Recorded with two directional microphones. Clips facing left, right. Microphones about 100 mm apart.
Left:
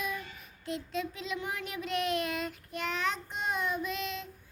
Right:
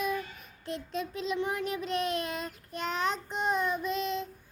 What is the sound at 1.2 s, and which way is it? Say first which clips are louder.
Child singing: right 5 dB; 35° right (ahead or behind).